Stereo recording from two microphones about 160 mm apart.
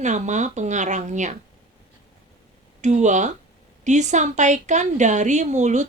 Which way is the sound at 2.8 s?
45° right (ahead or behind).